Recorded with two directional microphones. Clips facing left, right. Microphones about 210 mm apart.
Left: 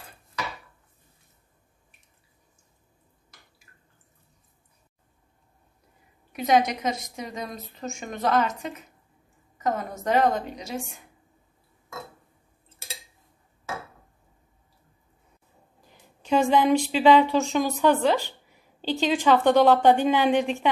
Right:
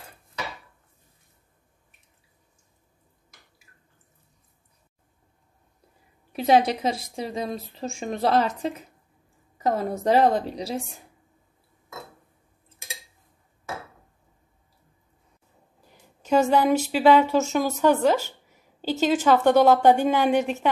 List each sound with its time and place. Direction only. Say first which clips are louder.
6.3 s a woman's voice: right 2 dB; 30° right (ahead or behind)
16.3 s a woman's voice: right 1 dB; 5° right (ahead or behind)